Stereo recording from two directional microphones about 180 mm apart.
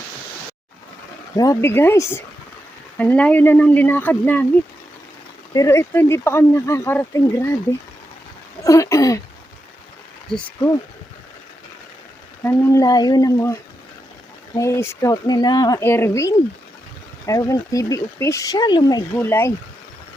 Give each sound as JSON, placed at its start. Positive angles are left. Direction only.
{"t": 1.4, "sound": "speech", "side_deg": 15}
{"t": 5.5, "sound": "speech", "side_deg": 15}
{"t": 8.6, "sound": "a sound", "side_deg": 15}
{"t": 10.3, "sound": "speech", "side_deg": 5}
{"t": 12.4, "sound": "speech", "side_deg": 15}